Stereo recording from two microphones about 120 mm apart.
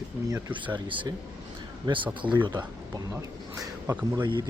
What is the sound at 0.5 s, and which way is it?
Speech, 45° right (ahead or behind).